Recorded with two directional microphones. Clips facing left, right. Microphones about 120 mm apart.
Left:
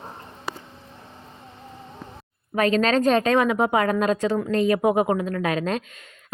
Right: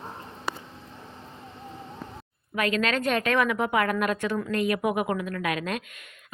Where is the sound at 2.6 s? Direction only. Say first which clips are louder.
Left 6 dB; 35° left (ahead or behind).